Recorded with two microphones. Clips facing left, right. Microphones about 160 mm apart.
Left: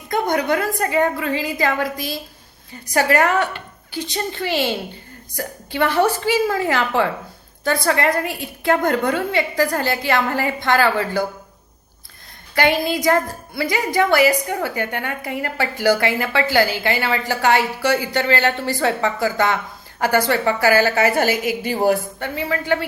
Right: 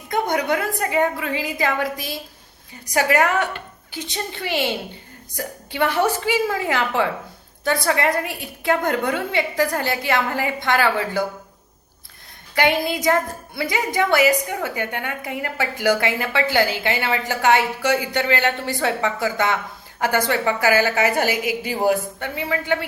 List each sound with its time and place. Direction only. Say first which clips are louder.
0.1 s a woman's voice: left 2 dB; 20° right (ahead or behind)
5.7 s a woman's voice: left 2 dB; 15° right (ahead or behind)
12.5 s a woman's voice: left 2 dB; 20° right (ahead or behind)